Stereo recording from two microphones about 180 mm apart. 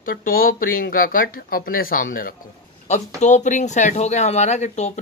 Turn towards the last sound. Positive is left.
turn(degrees=40)  # may be behind; listen again after turning